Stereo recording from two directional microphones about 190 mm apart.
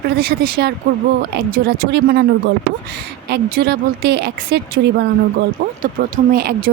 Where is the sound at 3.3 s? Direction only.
55° right (ahead or behind).